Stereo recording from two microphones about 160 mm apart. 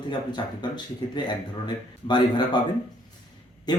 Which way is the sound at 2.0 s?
25° left (ahead or behind).